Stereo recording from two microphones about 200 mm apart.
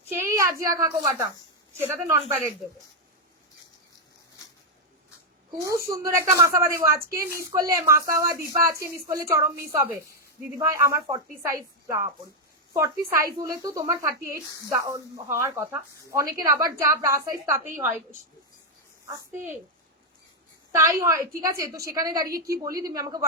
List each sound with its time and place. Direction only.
0.2 s a sound: 15° right (ahead or behind)
0.7 s speech: 15° right (ahead or behind)
5.5 s speech: 15° right (ahead or behind)
19.1 s speech: 10° right (ahead or behind)
20.7 s speech: 15° right (ahead or behind)